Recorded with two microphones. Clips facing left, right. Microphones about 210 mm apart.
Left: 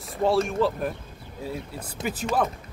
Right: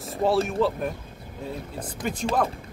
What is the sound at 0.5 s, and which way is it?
Speech, centre (ahead or behind).